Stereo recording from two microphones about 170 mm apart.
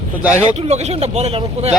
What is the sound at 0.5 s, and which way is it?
A man's voice, 40° right (ahead or behind).